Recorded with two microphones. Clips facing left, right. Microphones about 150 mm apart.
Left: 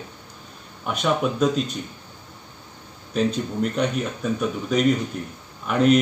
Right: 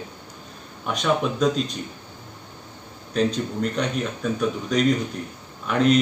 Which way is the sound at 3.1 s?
5° left (ahead or behind).